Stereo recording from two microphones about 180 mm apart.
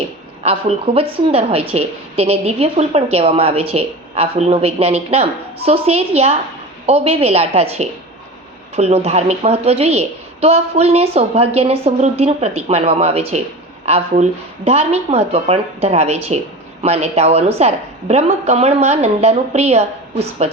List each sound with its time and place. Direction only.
0.4 s a woman's voice: 35° right (ahead or behind)